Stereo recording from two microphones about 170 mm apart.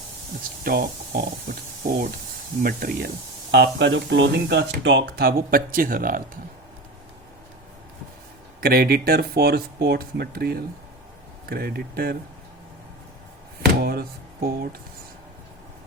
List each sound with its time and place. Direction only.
0.6 s speech: 60° right (ahead or behind)
2.6 s speech: 60° right (ahead or behind)
3.5 s speech: 80° right; by 6.4 s 55° right (ahead or behind)
8.6 s speech: 60° right (ahead or behind)
13.7 s speech: 60° right (ahead or behind)